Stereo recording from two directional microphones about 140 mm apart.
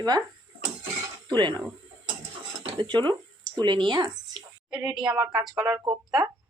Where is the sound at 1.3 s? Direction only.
35° right (ahead or behind).